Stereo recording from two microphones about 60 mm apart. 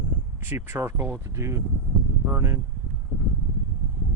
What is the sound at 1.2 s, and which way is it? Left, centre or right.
Speech, right.